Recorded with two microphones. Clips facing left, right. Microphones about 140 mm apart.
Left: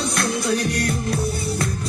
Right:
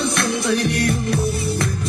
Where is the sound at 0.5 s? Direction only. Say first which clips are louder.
Right 3 dB; 25° right (ahead or behind).